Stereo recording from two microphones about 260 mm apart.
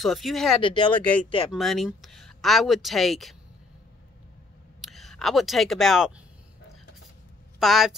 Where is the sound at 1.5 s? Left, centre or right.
Centre.